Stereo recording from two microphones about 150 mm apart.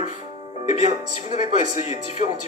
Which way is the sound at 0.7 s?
50° left (ahead or behind).